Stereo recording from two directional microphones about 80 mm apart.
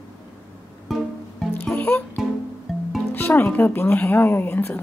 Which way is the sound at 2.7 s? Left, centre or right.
Centre.